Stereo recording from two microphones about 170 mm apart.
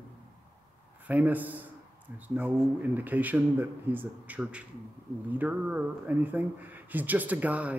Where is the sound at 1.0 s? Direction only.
10° right (ahead or behind).